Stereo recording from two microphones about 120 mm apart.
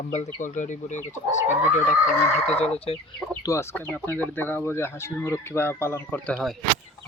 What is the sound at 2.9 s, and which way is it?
Speech, 55° left (ahead or behind).